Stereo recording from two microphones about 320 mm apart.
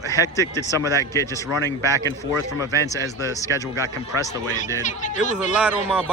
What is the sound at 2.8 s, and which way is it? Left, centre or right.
Speech, centre.